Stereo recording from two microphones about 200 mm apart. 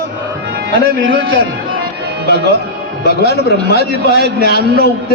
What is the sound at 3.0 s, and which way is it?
A man's voice, 55° left (ahead or behind).